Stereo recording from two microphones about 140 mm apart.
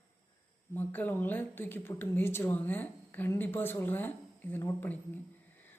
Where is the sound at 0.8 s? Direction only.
15° left (ahead or behind).